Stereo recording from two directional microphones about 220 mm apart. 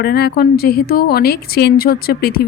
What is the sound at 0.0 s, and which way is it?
A woman's voice, 45° left (ahead or behind).